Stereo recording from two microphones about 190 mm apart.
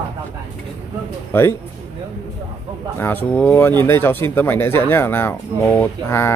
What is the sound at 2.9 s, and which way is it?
Speech, 10° left (ahead or behind).